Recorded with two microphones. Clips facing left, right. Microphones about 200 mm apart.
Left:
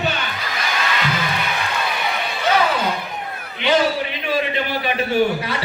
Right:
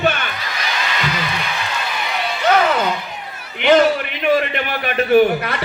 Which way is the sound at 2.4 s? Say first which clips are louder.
Right 3 dB; 55° right (ahead or behind).